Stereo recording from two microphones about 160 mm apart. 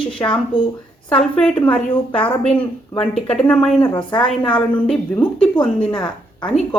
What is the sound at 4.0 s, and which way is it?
Speech, 30° left (ahead or behind).